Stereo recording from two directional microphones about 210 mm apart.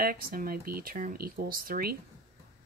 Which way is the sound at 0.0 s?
45° right (ahead or behind).